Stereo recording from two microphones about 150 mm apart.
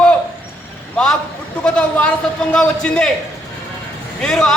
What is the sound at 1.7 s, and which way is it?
A man's voice, 5° left (ahead or behind).